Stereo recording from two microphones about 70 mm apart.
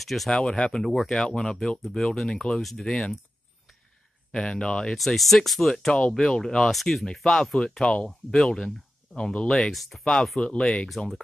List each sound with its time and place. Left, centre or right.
0.0 s speech: centre
4.3 s speech: centre
5.9 s speech: centre
9.5 s speech: centre